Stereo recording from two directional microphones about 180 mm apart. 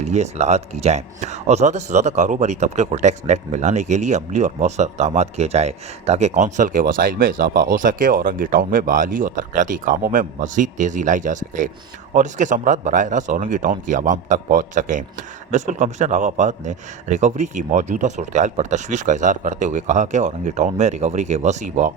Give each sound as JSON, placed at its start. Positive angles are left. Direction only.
{"t": 0.0, "sound": "a man's voice", "side_deg": -40}